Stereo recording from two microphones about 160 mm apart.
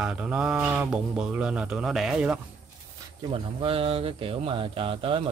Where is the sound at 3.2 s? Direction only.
35° right (ahead or behind).